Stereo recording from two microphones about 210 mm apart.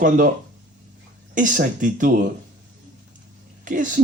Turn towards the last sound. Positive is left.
turn(degrees=-40)  # may be behind; listen again after turning